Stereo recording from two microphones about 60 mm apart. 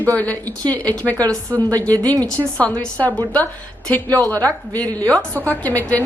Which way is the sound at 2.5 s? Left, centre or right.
Centre.